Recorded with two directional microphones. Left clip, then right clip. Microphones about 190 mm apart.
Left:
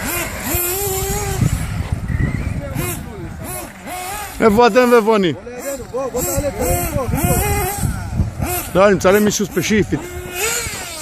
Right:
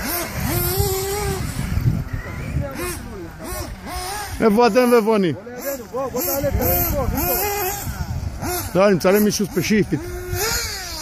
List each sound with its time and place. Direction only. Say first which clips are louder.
0.0 s vehicle: left 3 dB; 20° left (ahead or behind)
0.5 s vehicle: right 1 dB; 65° left (ahead or behind)
4.4 s speech: left 4 dB; centre (ahead or behind)
8.4 s a sound: left 2 dB; 20° left (ahead or behind)
8.7 s speech: left 4 dB; 5° right (ahead or behind)
10.3 s a sound: left 2 dB; 45° left (ahead or behind)